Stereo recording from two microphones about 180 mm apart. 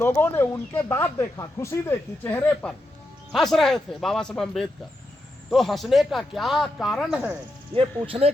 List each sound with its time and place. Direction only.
0.0 s speech: 10° left (ahead or behind); by 7.3 s 5° right (ahead or behind)
7.8 s speech: 30° right (ahead or behind)